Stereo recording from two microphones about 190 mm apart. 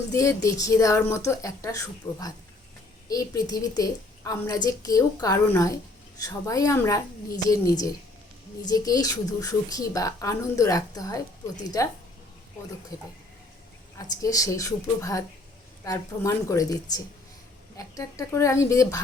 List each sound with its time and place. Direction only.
0.1 s a woman's voice: 15° left (ahead or behind)
14.2 s a woman's voice: 20° left (ahead or behind)